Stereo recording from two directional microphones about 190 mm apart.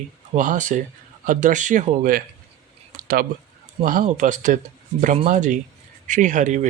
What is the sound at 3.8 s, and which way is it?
Speech, 45° right (ahead or behind).